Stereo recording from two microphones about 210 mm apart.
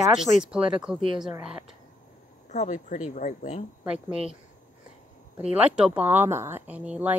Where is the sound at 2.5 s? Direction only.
35° left (ahead or behind).